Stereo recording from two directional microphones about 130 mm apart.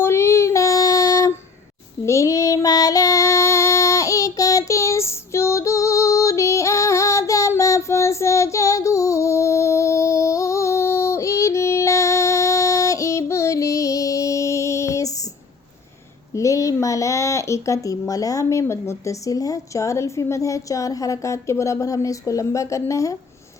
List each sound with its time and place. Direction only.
0.0 s child singing: 20° left (ahead or behind)
16.3 s speech: 25° left (ahead or behind)